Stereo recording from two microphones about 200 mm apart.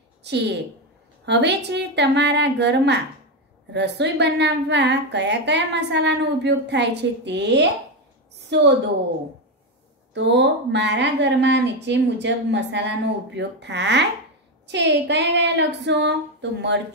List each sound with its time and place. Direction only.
0.2 s a woman's voice: 60° right (ahead or behind)
10.1 s a woman's voice: 60° right (ahead or behind)